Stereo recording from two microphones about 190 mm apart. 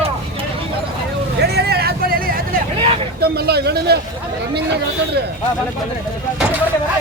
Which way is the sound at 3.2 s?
55° right (ahead or behind).